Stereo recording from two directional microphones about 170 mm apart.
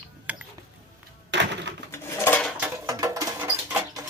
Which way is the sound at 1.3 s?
90° right.